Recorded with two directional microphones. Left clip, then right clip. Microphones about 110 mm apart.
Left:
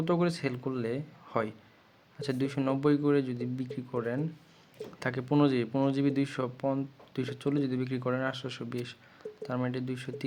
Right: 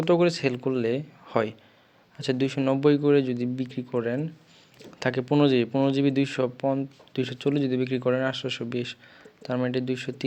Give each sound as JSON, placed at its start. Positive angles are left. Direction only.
{"t": 0.0, "sound": "speech", "side_deg": -25}